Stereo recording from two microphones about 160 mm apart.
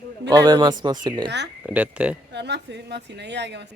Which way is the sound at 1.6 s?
10° right (ahead or behind).